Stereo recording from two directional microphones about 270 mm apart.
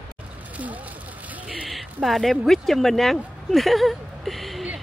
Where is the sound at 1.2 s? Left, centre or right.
Centre.